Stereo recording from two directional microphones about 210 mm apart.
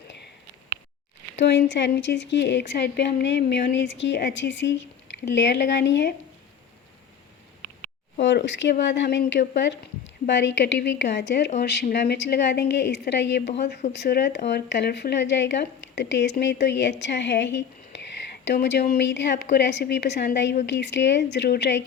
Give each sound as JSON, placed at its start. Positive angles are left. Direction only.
{"t": 1.4, "sound": "speech", "side_deg": 55}
{"t": 8.2, "sound": "speech", "side_deg": 55}